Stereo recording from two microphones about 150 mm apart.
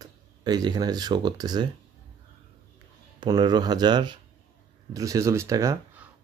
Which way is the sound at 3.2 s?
30° right (ahead or behind).